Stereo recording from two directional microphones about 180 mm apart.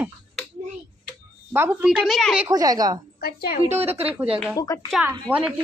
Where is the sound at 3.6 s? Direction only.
10° right (ahead or behind).